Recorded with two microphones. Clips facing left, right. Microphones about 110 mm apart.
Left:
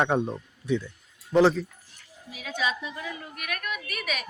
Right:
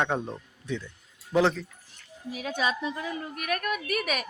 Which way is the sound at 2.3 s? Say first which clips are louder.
Right 1 dB; 45° right (ahead or behind).